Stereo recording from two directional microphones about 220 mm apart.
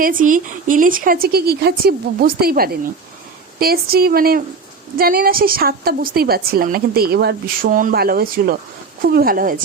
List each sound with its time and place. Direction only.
0.0 s a woman's voice: 40° right (ahead or behind)